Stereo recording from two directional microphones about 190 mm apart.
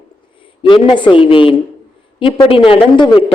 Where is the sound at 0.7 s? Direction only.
25° left (ahead or behind).